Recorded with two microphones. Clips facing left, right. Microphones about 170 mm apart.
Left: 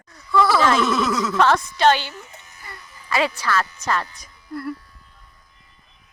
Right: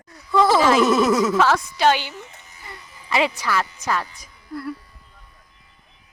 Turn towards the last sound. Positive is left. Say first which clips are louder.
# left 1 dB
turn(degrees=0)  # may be behind; listen again after turning